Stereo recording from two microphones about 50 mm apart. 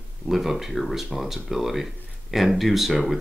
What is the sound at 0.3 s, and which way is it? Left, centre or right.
Speech, centre.